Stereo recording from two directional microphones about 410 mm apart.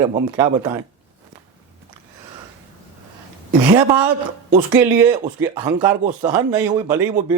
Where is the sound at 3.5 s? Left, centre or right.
Centre.